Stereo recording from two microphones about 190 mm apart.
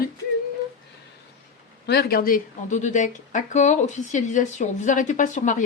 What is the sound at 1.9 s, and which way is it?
A woman's voice, 55° left (ahead or behind).